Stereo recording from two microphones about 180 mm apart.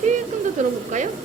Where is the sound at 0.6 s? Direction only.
40° right (ahead or behind).